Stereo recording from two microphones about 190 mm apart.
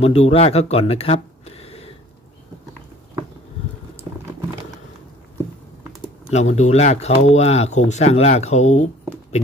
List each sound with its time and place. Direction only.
0.0 s speech: 35° left (ahead or behind)
6.3 s speech: 35° left (ahead or behind)